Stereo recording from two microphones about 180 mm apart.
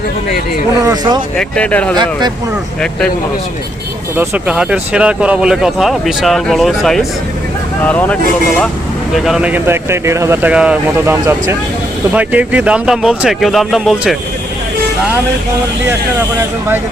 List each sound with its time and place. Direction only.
0.8 s speech: 20° right (ahead or behind)
1.4 s speech: 5° left (ahead or behind)
4.2 s speech: 5° right (ahead or behind)